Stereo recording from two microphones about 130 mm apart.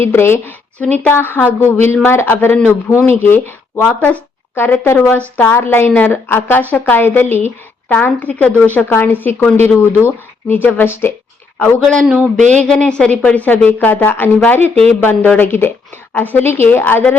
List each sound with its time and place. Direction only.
0.0 s a woman's voice: 20° left (ahead or behind)